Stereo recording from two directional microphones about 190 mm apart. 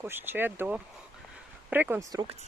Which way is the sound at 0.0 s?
10° right (ahead or behind).